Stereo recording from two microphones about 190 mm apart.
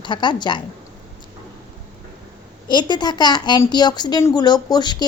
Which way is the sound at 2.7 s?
25° left (ahead or behind).